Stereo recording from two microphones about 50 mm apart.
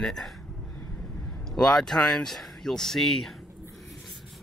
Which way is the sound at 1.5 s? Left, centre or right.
Centre.